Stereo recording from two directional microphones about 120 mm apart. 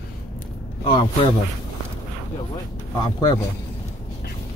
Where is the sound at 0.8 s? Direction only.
45° left (ahead or behind).